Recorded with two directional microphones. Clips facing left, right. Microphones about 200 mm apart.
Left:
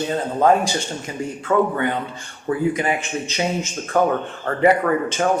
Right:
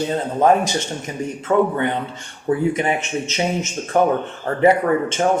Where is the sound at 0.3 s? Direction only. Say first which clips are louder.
Right 1 dB; 20° right (ahead or behind).